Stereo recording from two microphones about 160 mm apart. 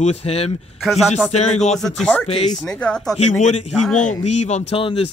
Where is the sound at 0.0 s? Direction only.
40° left (ahead or behind).